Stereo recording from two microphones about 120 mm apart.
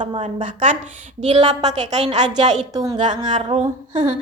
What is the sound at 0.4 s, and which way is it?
Speech, 90° right.